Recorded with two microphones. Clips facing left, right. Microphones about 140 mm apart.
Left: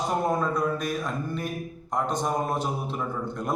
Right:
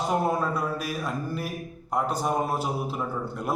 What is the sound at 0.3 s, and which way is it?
A man's voice, 5° right (ahead or behind).